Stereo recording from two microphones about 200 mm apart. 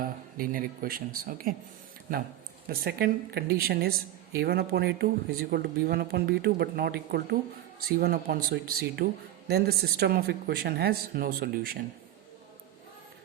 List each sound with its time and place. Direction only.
0.3 s speech: 45° right (ahead or behind)
2.6 s speech: 50° right (ahead or behind)